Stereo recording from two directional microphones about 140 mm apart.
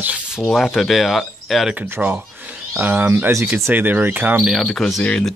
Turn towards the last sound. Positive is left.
turn(degrees=5)  # may be behind; listen again after turning